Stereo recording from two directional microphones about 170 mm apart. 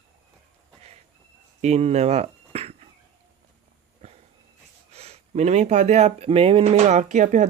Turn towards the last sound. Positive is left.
turn(degrees=-45)  # may be behind; listen again after turning